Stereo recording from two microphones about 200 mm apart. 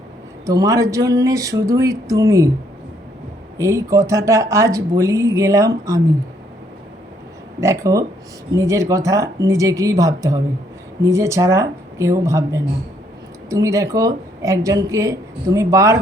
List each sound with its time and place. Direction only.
0.4 s speech: 15° right (ahead or behind)
3.6 s speech: 15° right (ahead or behind)
7.6 s speech: 15° right (ahead or behind)